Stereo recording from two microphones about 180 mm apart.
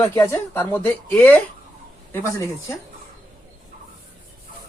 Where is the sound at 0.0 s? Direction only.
15° left (ahead or behind).